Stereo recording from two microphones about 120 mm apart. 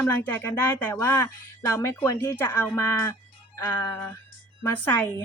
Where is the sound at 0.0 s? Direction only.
15° left (ahead or behind).